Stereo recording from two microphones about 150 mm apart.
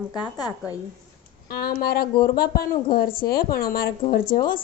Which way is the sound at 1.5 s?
90° left.